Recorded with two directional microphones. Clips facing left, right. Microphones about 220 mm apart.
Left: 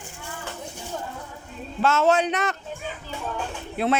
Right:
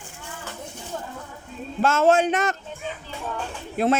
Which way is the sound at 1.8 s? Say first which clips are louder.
Right 2 dB; 50° right (ahead or behind).